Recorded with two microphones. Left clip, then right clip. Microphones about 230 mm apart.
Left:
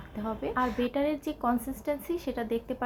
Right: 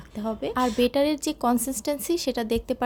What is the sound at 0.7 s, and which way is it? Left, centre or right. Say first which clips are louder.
Speech: right 7 dB; right.